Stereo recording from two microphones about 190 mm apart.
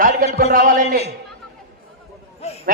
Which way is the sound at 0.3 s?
50° right (ahead or behind).